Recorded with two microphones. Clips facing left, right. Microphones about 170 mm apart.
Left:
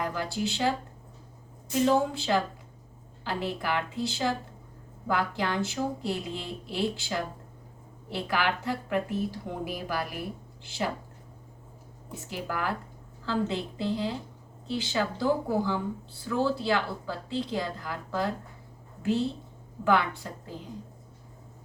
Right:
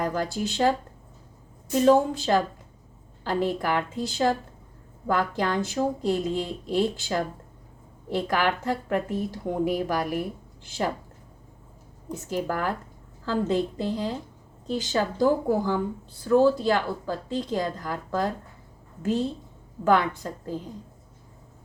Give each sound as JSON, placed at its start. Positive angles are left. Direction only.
{"t": 0.0, "sound": "speech", "side_deg": -45}
{"t": 1.8, "sound": "speech", "side_deg": -45}
{"t": 12.0, "sound": "speech", "side_deg": -45}